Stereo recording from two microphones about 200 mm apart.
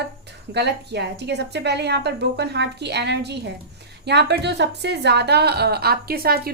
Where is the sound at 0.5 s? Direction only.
60° right (ahead or behind).